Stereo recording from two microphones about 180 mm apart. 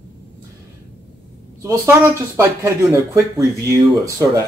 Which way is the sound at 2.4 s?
15° right (ahead or behind).